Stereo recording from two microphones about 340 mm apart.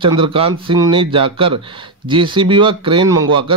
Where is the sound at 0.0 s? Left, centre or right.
Centre.